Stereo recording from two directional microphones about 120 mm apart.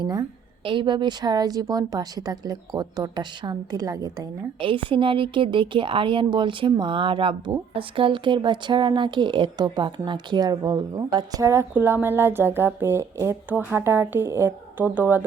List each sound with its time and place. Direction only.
0.0 s a woman's voice: 30° right (ahead or behind)
0.6 s a woman's voice: 45° right (ahead or behind)
4.6 s a woman's voice: 45° right (ahead or behind); by 11.6 s 25° right (ahead or behind)
11.7 s speech: 15° right (ahead or behind)